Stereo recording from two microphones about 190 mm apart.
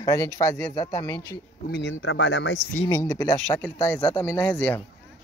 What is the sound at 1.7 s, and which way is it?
Speech, 65° left (ahead or behind).